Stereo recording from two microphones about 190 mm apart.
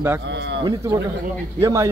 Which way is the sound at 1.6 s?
15° right (ahead or behind).